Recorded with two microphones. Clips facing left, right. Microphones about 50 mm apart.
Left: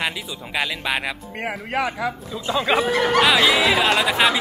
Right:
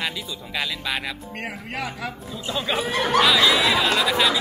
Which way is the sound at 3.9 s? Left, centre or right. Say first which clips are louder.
Left 2 dB; centre.